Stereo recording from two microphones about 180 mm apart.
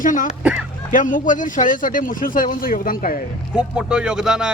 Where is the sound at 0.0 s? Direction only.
45° left (ahead or behind).